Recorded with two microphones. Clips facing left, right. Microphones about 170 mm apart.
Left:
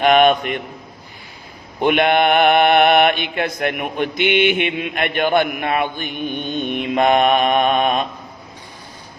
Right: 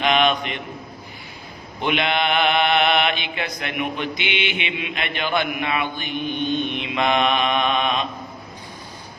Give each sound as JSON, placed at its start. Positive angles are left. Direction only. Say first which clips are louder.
{"t": 0.0, "sound": "a man's voice", "louder": "left 6 dB", "side_deg": 50}
{"t": 1.8, "sound": "mantra", "louder": "left 7 dB", "side_deg": 50}